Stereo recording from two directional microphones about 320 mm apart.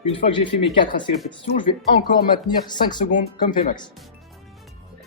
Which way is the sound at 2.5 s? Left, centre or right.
Left.